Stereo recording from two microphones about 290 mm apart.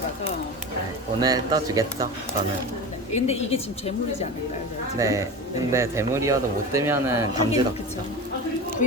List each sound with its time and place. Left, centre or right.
1.2 s speech: centre
3.1 s a woman's voice: left
4.9 s speech: centre